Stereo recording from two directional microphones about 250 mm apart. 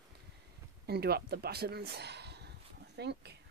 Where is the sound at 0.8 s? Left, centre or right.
Right.